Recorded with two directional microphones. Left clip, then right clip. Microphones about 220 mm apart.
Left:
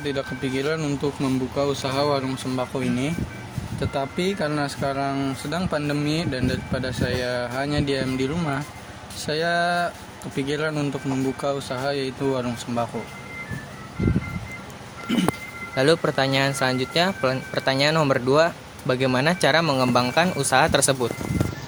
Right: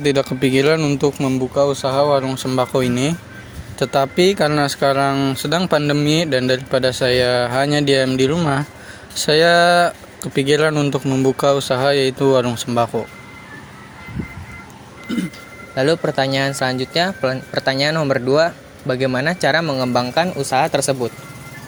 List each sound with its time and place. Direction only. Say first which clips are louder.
0.0 s speech: right 10 dB; 35° right (ahead or behind)
15.7 s speech: right 3 dB; 10° right (ahead or behind)